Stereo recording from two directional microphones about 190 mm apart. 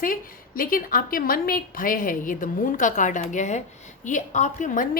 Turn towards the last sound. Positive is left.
turn(degrees=45)  # may be behind; listen again after turning